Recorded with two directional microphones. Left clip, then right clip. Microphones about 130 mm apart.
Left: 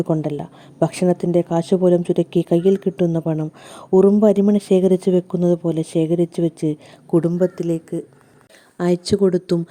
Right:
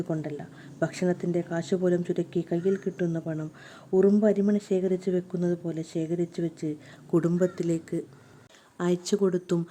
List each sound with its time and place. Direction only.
0.2 s a woman's voice: 60° left (ahead or behind)
7.3 s speech: 20° left (ahead or behind)
8.8 s speech: 40° left (ahead or behind)